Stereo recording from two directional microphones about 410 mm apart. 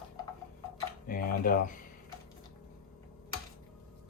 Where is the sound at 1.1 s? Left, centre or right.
Left.